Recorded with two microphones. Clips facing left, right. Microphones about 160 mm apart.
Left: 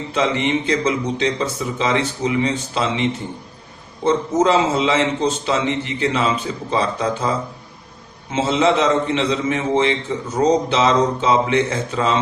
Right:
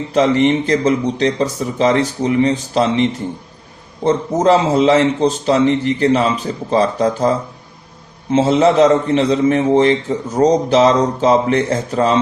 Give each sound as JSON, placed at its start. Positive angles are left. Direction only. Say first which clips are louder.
{"t": 0.1, "sound": "speech", "louder": "right 6 dB", "side_deg": -40}
{"t": 4.0, "sound": "speech", "louder": "right 2 dB", "side_deg": -40}